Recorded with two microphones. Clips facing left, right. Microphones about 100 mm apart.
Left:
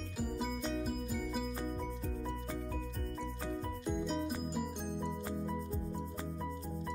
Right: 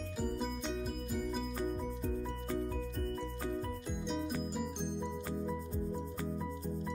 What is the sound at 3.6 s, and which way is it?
Music, centre (ahead or behind).